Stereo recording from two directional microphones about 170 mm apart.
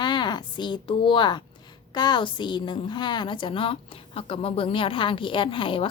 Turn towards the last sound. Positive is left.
turn(degrees=30)  # may be behind; listen again after turning